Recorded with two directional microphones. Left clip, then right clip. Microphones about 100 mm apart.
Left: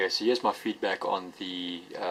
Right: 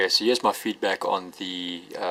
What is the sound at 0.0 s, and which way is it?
Speech, 40° right (ahead or behind).